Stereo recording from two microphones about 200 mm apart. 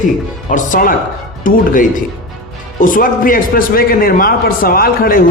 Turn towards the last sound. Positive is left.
turn(degrees=45)  # may be behind; listen again after turning